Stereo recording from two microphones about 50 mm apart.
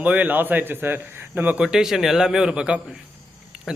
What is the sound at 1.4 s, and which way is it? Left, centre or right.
Speech, right.